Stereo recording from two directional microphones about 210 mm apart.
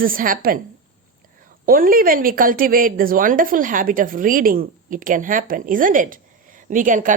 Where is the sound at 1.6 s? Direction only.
45° right (ahead or behind).